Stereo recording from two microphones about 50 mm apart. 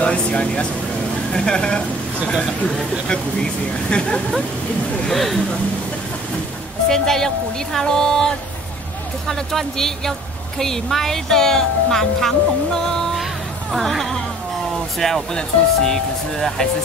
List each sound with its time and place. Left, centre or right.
0.0 s speech: left
2.6 s speech: centre
5.1 s speech: centre
6.9 s speech: centre
9.3 s speech: centre
13.2 s music: centre
15.0 s speech: centre